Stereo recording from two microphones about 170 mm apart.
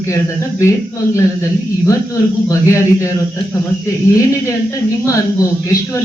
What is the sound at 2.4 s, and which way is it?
A man's voice, 20° left (ahead or behind).